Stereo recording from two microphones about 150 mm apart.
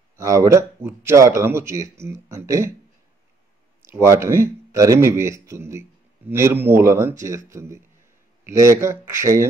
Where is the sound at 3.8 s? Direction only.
15° right (ahead or behind).